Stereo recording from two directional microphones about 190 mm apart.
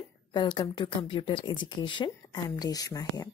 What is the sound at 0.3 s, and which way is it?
A woman's voice, 25° left (ahead or behind).